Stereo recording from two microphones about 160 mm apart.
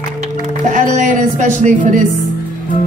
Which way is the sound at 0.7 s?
55° right (ahead or behind).